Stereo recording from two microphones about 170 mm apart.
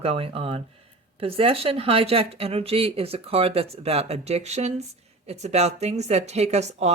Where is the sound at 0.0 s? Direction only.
35° right (ahead or behind).